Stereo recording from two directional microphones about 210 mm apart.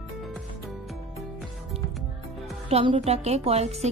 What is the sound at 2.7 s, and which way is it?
Speech, 30° right (ahead or behind).